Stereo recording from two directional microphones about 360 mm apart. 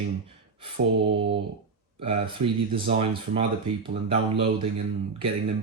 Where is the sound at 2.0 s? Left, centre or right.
Centre.